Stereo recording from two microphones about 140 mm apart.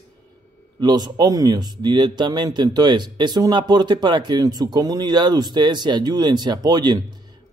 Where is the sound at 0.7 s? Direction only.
30° right (ahead or behind).